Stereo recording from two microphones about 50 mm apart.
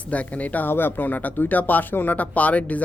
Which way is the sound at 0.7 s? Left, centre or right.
Left.